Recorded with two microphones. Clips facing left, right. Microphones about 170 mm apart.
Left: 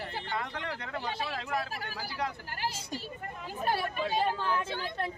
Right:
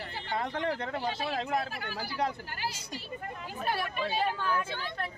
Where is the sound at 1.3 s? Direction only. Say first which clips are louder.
Right 3 dB; 30° right (ahead or behind).